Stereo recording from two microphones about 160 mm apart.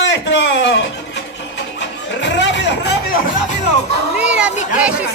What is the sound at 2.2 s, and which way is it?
Chatter, 90° left.